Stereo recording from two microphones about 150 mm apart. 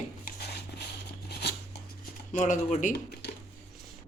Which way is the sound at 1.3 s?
90° left.